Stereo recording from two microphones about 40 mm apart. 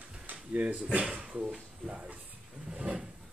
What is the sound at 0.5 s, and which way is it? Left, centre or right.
Speech, right.